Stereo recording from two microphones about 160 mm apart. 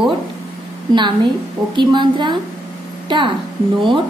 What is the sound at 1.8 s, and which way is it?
Speech, 30° right (ahead or behind).